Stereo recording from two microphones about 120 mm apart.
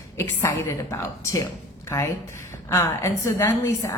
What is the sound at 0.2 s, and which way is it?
A woman's voice, 25° left (ahead or behind).